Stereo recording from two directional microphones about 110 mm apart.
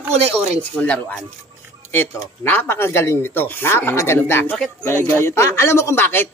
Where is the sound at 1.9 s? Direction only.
20° left (ahead or behind).